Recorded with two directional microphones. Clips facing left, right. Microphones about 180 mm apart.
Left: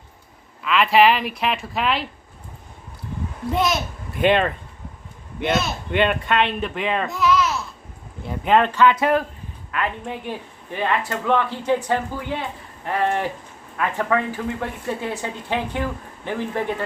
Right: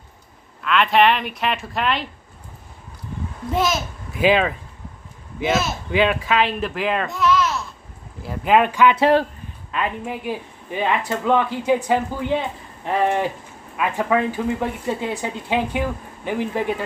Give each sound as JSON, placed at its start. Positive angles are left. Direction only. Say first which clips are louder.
{"t": 0.6, "sound": "speech", "louder": "left 1 dB", "side_deg": 0}
{"t": 3.5, "sound": "speech", "louder": "right 1 dB", "side_deg": 0}
{"t": 9.0, "sound": "speech", "louder": "right 3 dB", "side_deg": -30}
{"t": 10.0, "sound": "speech", "louder": "right 3 dB", "side_deg": -5}